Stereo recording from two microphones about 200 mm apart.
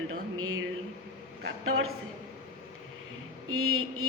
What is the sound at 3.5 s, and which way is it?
Speech, 90° right.